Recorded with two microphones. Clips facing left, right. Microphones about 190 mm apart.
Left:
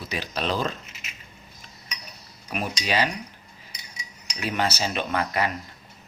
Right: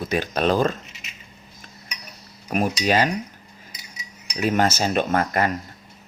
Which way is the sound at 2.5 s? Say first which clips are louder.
Right 6 dB; 45° right (ahead or behind).